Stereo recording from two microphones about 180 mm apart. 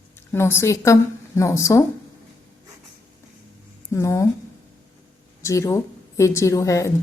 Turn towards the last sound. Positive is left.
turn(degrees=15)  # may be behind; listen again after turning